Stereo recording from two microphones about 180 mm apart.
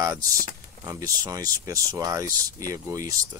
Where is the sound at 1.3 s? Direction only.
20° right (ahead or behind).